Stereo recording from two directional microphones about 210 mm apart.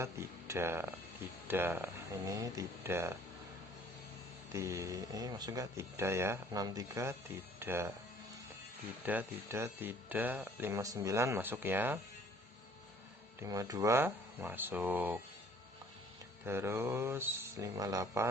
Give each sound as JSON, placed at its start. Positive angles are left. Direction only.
{"t": 0.0, "sound": "speech", "side_deg": -15}
{"t": 4.5, "sound": "speech", "side_deg": -15}
{"t": 9.0, "sound": "speech", "side_deg": -10}
{"t": 13.4, "sound": "speech", "side_deg": -15}
{"t": 16.5, "sound": "speech", "side_deg": -10}